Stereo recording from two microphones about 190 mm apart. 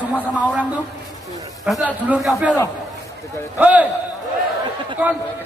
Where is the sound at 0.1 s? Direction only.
5° left (ahead or behind).